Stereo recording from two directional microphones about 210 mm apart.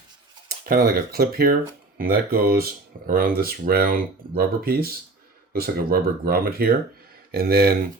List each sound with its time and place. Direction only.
0.6 s speech: 45° right (ahead or behind)